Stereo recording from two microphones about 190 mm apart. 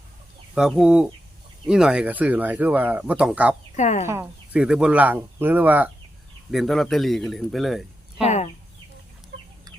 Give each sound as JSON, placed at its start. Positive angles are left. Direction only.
{"t": 0.5, "sound": "a man's voice", "side_deg": -5}
{"t": 3.8, "sound": "speech", "side_deg": 40}
{"t": 4.0, "sound": "a man's voice", "side_deg": -15}
{"t": 8.2, "sound": "speech", "side_deg": 35}